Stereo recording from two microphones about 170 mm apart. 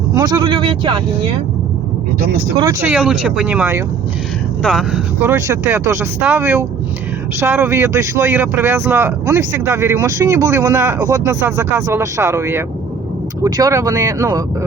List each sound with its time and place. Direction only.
0.1 s speech: 25° right (ahead or behind)
2.6 s speech: 10° right (ahead or behind)
5.2 s speech: 15° right (ahead or behind)